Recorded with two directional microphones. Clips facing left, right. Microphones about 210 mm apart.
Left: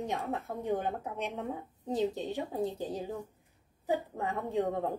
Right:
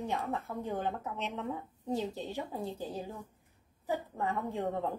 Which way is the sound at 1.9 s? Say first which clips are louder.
Left 4 dB; 20° left (ahead or behind).